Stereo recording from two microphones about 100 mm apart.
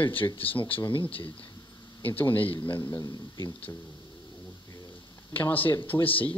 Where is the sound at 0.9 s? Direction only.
60° left (ahead or behind).